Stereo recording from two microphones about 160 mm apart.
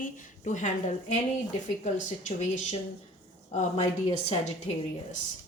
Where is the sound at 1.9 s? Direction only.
45° left (ahead or behind).